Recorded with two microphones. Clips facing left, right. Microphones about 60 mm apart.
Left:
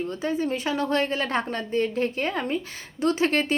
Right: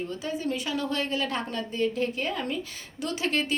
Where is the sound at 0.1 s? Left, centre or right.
Left.